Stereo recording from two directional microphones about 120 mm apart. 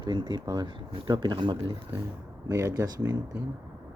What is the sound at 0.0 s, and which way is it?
Speech, 35° right (ahead or behind).